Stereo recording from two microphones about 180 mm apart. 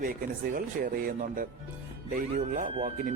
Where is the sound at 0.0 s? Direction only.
50° right (ahead or behind).